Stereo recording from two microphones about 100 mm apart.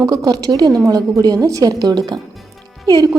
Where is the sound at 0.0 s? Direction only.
40° right (ahead or behind).